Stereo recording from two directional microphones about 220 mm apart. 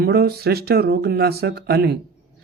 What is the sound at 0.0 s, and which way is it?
Speech, 45° right (ahead or behind).